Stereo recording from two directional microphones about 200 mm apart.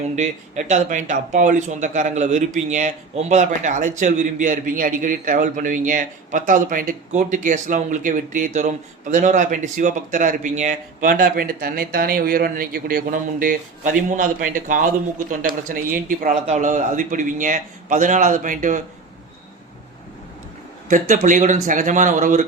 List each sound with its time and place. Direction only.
0.2 s speech: 40° right (ahead or behind)
20.8 s speech: 40° right (ahead or behind)